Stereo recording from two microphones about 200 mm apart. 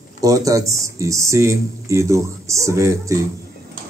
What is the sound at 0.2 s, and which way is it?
Speech, 15° right (ahead or behind).